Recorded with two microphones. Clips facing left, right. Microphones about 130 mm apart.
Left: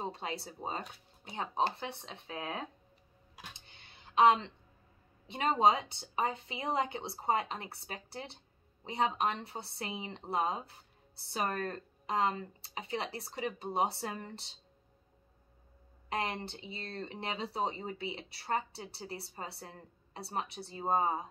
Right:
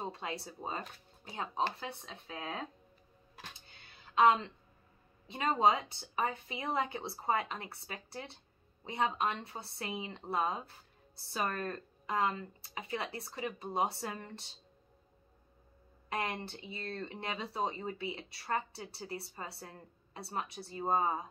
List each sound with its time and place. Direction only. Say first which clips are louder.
0.0 s speech: left 1 dB; 30° left (ahead or behind)
3.7 s music: left 1 dB; 25° left (ahead or behind)
5.3 s speech: left 1 dB; 30° left (ahead or behind)
16.1 s speech: left 1 dB; 25° left (ahead or behind)